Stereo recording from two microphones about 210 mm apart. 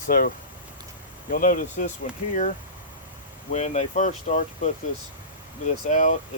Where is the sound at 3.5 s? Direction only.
30° left (ahead or behind).